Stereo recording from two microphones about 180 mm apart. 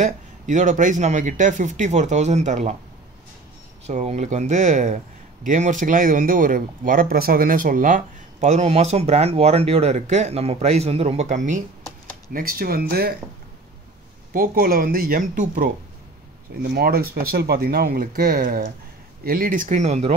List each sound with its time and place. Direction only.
0.0 s a man's voice: 40° right (ahead or behind)
3.8 s speech: 40° right (ahead or behind); by 13.1 s 55° right (ahead or behind)
14.3 s a man's voice: 55° right (ahead or behind)
16.6 s a man's voice: 60° right (ahead or behind); by 20.2 s 35° right (ahead or behind)